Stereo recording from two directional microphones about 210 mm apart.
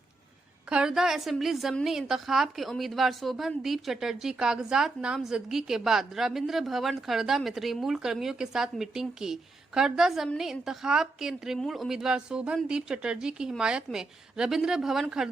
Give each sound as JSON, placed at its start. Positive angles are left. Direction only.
{"t": 0.7, "sound": "a woman's voice", "side_deg": -5}